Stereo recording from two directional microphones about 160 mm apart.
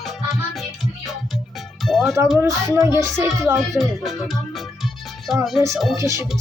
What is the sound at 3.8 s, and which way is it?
Speech, centre (ahead or behind).